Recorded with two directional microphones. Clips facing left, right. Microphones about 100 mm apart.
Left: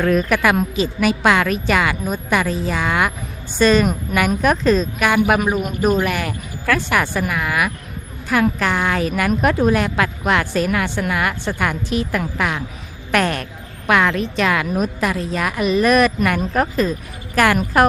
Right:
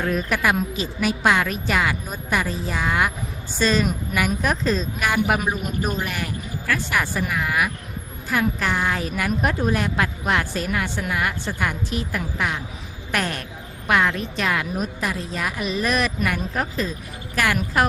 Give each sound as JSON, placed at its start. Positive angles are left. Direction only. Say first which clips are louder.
{"t": 0.0, "sound": "a woman's voice", "louder": "left 6 dB", "side_deg": 75}
{"t": 3.6, "sound": "a woman's voice", "louder": "left 6 dB", "side_deg": 60}